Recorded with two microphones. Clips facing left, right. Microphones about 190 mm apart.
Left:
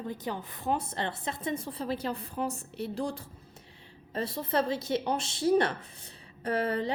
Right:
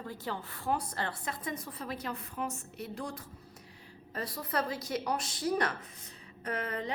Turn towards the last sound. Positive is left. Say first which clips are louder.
# left 7 dB
turn(degrees=30)  # may be behind; listen again after turning